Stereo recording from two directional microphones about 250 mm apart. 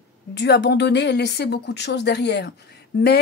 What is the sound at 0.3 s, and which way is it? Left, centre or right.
Speech, left.